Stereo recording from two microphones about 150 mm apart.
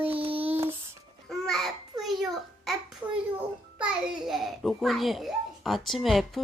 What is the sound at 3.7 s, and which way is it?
Babbling, 5° right (ahead or behind).